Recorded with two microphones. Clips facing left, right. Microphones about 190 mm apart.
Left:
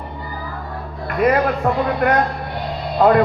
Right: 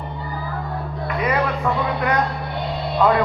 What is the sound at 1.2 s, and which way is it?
A man's voice, 50° left (ahead or behind).